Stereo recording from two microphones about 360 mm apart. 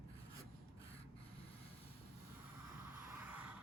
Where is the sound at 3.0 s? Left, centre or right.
Centre.